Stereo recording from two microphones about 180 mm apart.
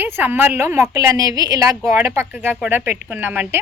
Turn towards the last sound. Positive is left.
turn(degrees=-10)  # may be behind; listen again after turning